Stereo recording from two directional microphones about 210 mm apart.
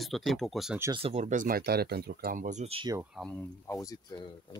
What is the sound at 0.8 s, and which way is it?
Speech, 25° right (ahead or behind).